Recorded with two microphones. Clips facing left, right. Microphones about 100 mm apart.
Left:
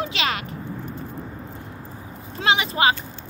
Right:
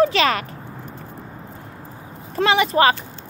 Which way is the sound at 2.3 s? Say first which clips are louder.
Right 5 dB; 45° right (ahead or behind).